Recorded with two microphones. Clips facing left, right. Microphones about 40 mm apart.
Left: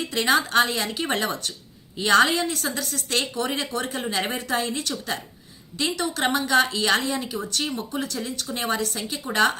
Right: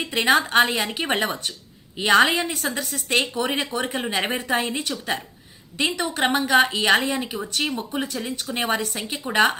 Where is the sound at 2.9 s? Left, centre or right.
Right.